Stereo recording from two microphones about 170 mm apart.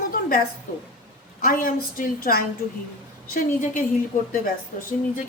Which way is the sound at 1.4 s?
55° left (ahead or behind).